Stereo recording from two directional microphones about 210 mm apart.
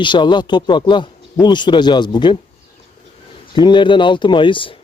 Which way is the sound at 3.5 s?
20° left (ahead or behind).